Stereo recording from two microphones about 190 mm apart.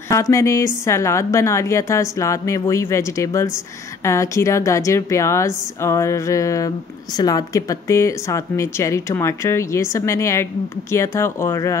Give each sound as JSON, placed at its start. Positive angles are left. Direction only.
{"t": 0.1, "sound": "a woman's voice", "side_deg": 15}